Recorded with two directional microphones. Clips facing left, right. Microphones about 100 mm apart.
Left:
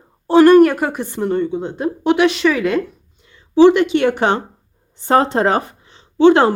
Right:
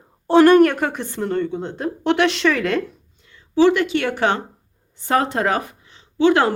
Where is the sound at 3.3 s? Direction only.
20° left (ahead or behind).